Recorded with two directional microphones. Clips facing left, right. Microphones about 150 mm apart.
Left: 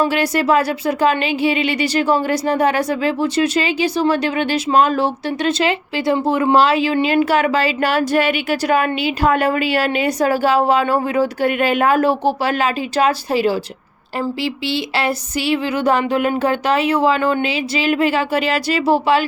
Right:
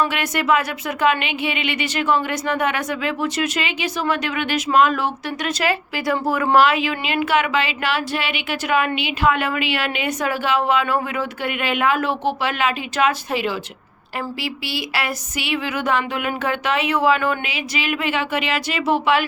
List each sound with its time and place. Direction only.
0.0 s speech: 35° left (ahead or behind)